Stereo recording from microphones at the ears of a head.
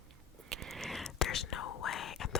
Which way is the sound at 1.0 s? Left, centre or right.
Left.